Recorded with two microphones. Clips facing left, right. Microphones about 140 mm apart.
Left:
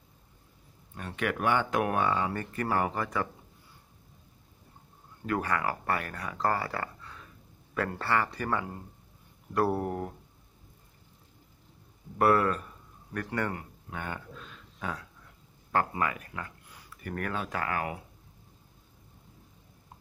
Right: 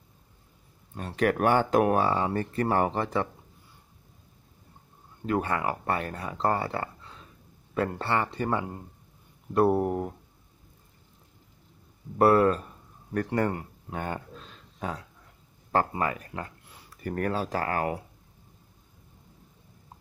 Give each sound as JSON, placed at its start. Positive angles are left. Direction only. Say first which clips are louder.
{"t": 0.9, "sound": "speech", "louder": "right 7 dB", "side_deg": -35}
{"t": 5.2, "sound": "speech", "louder": "right 2 dB", "side_deg": -25}
{"t": 12.2, "sound": "speech", "louder": "right 4 dB", "side_deg": -30}